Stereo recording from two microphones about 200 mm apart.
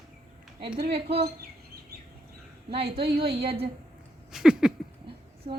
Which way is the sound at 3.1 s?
30° right (ahead or behind).